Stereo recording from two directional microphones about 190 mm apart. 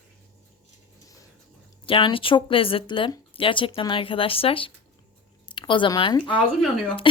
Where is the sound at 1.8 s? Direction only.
25° left (ahead or behind).